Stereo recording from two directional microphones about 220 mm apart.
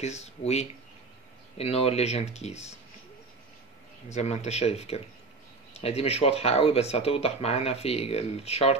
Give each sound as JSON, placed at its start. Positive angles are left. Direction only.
{"t": 0.0, "sound": "speech", "side_deg": 30}
{"t": 4.1, "sound": "speech", "side_deg": 30}